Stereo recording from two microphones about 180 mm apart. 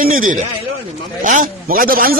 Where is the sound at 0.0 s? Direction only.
50° right (ahead or behind).